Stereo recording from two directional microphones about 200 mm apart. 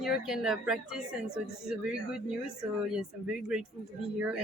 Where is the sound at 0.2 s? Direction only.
Centre (ahead or behind).